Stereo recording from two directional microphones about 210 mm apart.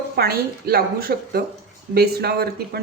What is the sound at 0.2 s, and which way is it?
Speech, 45° right (ahead or behind).